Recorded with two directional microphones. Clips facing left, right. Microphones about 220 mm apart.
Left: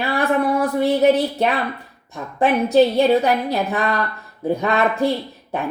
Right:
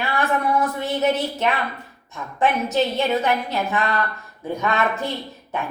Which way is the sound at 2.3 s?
35° left (ahead or behind).